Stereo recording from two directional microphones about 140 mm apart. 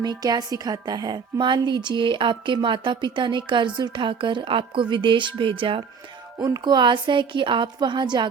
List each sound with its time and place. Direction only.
0.0 s a woman's voice: 30° right (ahead or behind)
6.4 s a woman's voice: 30° right (ahead or behind)